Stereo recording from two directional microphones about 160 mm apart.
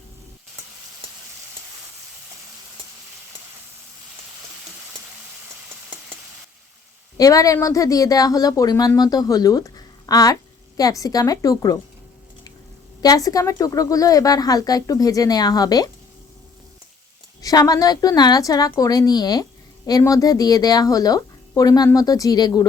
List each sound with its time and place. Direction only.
7.2 s speech: 20° left (ahead or behind)
13.0 s speech: 20° left (ahead or behind)
17.4 s speech: 20° left (ahead or behind)